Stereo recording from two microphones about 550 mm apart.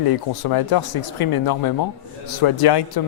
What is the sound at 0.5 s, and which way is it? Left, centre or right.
Speech, left.